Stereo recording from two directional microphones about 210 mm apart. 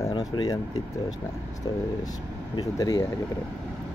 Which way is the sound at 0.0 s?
20° left (ahead or behind).